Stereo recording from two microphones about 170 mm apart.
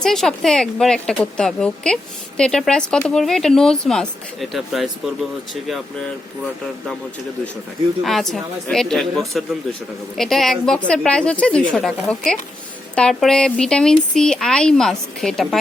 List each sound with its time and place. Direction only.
0.0 s speech: centre (ahead or behind)
8.0 s speech: centre (ahead or behind)